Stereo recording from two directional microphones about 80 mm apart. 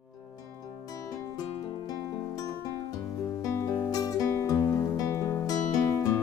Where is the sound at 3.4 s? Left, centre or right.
Left.